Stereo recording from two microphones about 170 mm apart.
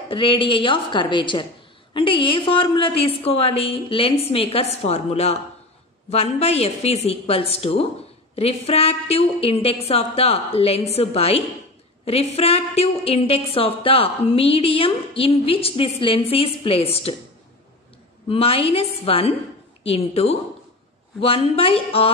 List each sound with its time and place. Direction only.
0.1 s a woman's voice: 30° left (ahead or behind)
18.3 s a woman's voice: 35° left (ahead or behind)